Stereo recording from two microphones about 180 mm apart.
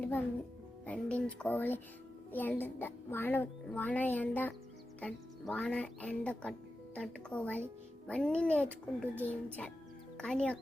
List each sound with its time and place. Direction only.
0.9 s speech: 5° left (ahead or behind)